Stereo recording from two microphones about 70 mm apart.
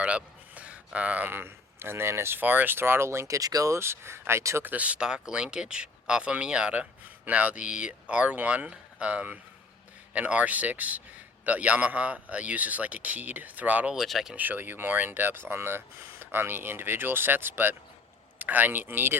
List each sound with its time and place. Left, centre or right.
0.0 s a sound: centre
0.9 s a man's voice: right
1.3 s speech: right
3.8 s speech: right
4.6 s a man's voice: right
13.9 s speech: centre
14.3 s a man's voice: right